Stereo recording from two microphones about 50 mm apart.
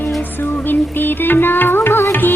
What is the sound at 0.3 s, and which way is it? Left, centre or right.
Music, left.